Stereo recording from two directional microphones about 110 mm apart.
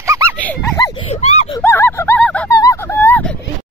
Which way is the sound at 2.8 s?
15° left (ahead or behind).